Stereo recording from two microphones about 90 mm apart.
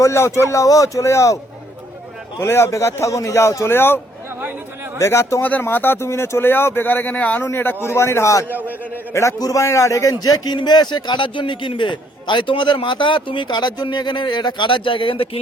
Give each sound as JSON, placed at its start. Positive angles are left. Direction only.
{"t": 0.0, "sound": "a man's voice", "side_deg": 30}
{"t": 2.4, "sound": "a man's voice", "side_deg": 30}
{"t": 8.4, "sound": "a man's voice", "side_deg": -20}
{"t": 9.1, "sound": "a man's voice", "side_deg": 35}